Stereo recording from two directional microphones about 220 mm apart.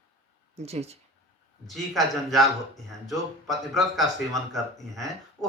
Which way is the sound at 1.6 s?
Centre (ahead or behind).